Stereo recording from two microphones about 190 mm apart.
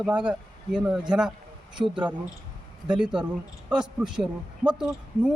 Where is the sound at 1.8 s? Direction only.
25° right (ahead or behind).